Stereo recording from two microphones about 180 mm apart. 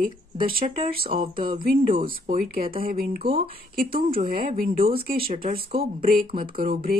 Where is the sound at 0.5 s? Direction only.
55° right (ahead or behind).